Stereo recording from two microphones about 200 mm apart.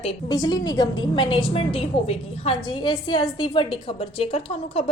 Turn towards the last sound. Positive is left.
turn(degrees=30)  # may be behind; listen again after turning